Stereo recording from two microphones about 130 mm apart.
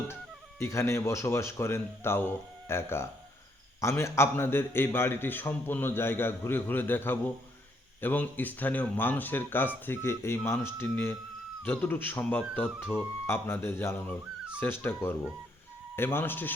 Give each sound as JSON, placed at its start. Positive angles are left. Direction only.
{"t": 0.6, "sound": "a man's voice", "side_deg": 20}